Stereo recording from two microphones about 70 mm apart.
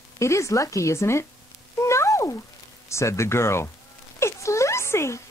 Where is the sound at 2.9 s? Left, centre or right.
Left.